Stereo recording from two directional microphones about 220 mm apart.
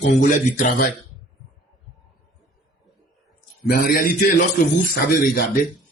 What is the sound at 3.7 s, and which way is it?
Speech, 45° left (ahead or behind).